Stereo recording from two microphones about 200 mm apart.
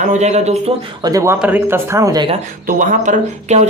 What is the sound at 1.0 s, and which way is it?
Speech, 15° right (ahead or behind).